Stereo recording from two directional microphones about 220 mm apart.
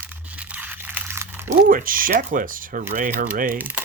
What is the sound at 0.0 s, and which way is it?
Crunch, 5° right (ahead or behind).